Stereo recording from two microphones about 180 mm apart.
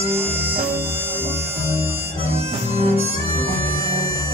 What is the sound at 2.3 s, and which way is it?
Music, 35° right (ahead or behind).